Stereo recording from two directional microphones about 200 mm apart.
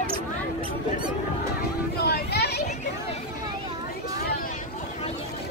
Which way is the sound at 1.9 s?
55° left (ahead or behind).